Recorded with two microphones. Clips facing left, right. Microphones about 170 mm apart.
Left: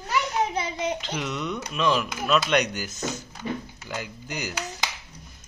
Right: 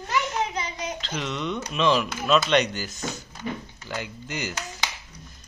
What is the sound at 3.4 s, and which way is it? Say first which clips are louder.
Speech: left 1 dB; 30° left (ahead or behind).